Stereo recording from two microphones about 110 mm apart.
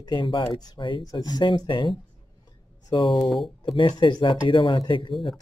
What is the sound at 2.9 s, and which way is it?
Speech, 50° left (ahead or behind).